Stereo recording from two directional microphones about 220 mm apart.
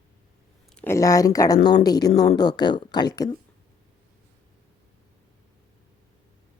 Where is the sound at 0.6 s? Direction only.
5° left (ahead or behind).